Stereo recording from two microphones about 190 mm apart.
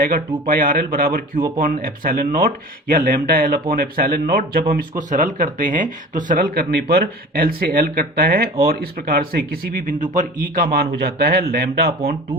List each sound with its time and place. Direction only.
0.0 s speech: 50° right (ahead or behind)